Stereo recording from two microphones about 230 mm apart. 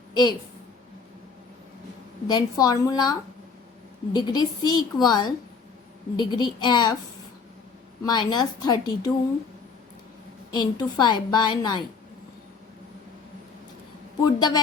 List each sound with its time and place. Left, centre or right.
0.1 s a woman's voice: centre
2.2 s a woman's voice: centre
8.0 s a woman's voice: centre
10.6 s a woman's voice: centre
14.3 s a woman's voice: centre